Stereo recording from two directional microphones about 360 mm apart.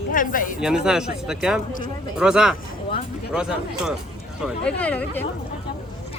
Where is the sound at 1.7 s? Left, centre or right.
Left.